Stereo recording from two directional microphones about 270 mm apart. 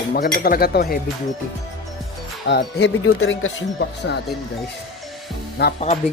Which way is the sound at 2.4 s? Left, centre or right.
Left.